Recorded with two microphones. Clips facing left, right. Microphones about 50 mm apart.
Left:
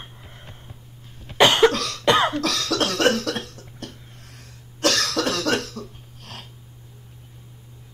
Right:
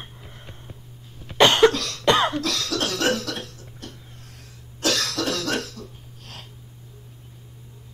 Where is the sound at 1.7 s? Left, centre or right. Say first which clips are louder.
Left 1 dB; left.